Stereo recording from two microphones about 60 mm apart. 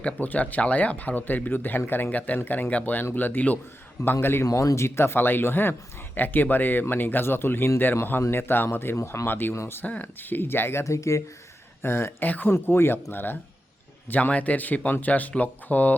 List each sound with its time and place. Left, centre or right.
0.0 s speech: left
4.4 s speech: left
4.9 s speech: left
9.0 s speech: left
9.2 s speech: left
9.8 s speech: left
10.8 s speech: left
11.8 s speech: left
12.2 s speech: left
12.5 s speech: left
14.1 s speech: left